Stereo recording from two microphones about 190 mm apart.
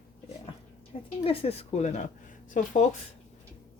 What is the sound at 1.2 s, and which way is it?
Speech, 30° left (ahead or behind).